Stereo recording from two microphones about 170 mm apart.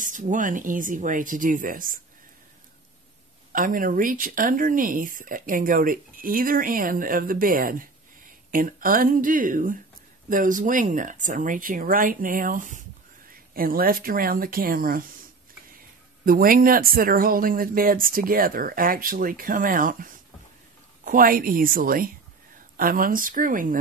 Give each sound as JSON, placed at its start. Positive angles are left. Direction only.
{"t": 0.0, "sound": "speech", "side_deg": -50}
{"t": 3.5, "sound": "speech", "side_deg": -50}
{"t": 16.3, "sound": "speech", "side_deg": -55}